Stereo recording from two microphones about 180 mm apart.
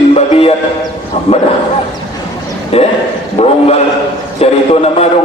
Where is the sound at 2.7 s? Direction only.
35° left (ahead or behind).